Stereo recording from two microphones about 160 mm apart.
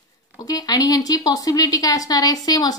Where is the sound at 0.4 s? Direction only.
25° left (ahead or behind).